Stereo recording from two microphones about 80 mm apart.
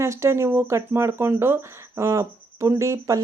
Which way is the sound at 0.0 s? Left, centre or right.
Right.